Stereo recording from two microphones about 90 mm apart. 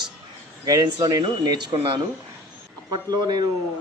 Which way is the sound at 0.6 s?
45° right (ahead or behind).